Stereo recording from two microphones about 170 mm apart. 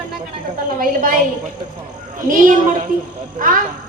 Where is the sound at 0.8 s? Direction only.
55° right (ahead or behind).